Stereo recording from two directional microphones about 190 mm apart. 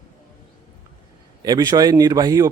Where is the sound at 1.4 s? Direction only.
20° right (ahead or behind).